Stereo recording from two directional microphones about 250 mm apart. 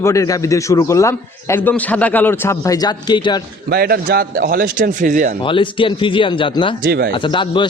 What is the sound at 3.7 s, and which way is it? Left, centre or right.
A man's voice, right.